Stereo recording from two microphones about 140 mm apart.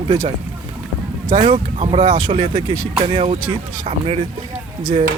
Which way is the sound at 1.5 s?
45° right (ahead or behind).